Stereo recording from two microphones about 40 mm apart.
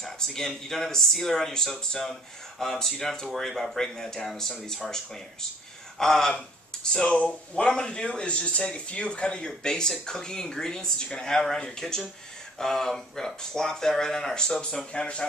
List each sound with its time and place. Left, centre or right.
0.0 s speech: centre
5.9 s speech: centre
7.2 s speech: left